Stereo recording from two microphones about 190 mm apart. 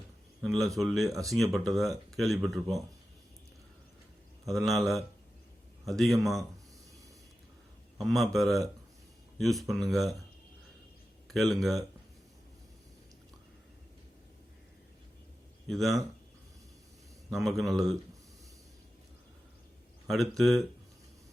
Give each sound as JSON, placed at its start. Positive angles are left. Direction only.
{"t": 0.4, "sound": "speech", "side_deg": 0}
{"t": 1.0, "sound": "speech", "side_deg": -15}
{"t": 1.3, "sound": "speech", "side_deg": 0}
{"t": 4.4, "sound": "speech", "side_deg": 0}
{"t": 8.0, "sound": "speech", "side_deg": 0}
{"t": 11.3, "sound": "speech", "side_deg": 0}
{"t": 15.6, "sound": "speech", "side_deg": 0}
{"t": 17.3, "sound": "speech", "side_deg": 0}
{"t": 20.1, "sound": "speech", "side_deg": 0}